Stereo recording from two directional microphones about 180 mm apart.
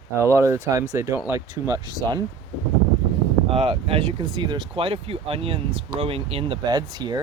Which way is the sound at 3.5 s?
30° right (ahead or behind).